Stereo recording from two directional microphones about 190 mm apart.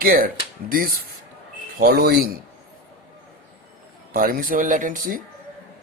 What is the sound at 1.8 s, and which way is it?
Speech, 55° right (ahead or behind).